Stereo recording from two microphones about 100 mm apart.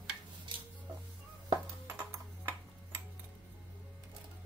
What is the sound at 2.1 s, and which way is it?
Tick-tock, 25° right (ahead or behind).